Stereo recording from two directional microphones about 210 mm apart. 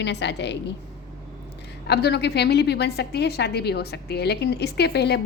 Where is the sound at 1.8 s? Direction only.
50° left (ahead or behind).